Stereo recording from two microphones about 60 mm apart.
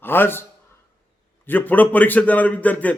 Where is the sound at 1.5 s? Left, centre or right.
Left.